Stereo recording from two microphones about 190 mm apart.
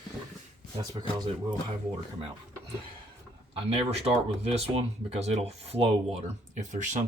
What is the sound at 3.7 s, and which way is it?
Speech, 30° right (ahead or behind).